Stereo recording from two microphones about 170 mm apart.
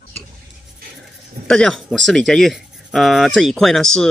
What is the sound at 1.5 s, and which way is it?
Speech, centre (ahead or behind).